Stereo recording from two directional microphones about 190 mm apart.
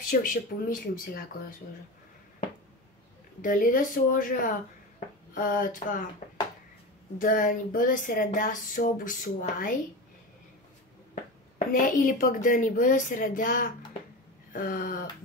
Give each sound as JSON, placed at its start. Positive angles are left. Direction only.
{"t": 0.1, "sound": "speech", "side_deg": 45}
{"t": 3.4, "sound": "speech", "side_deg": 45}
{"t": 7.2, "sound": "speech", "side_deg": 45}
{"t": 11.5, "sound": "speech", "side_deg": 45}